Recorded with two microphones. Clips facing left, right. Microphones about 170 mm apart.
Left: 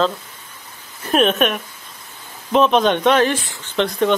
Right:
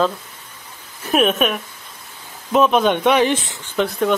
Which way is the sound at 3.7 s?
5° right (ahead or behind).